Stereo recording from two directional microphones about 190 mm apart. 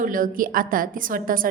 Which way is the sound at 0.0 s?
45° right (ahead or behind).